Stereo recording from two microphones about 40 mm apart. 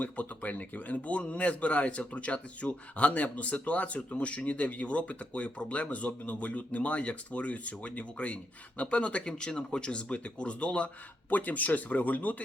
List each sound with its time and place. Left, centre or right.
0.0 s speech: left
11.3 s speech: left